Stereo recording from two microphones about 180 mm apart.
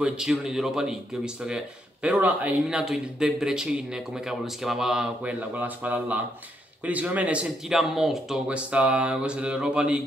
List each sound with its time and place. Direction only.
0.0 s a man's voice: 5° right (ahead or behind)